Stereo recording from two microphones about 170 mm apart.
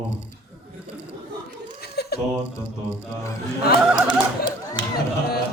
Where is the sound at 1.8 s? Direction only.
70° left (ahead or behind).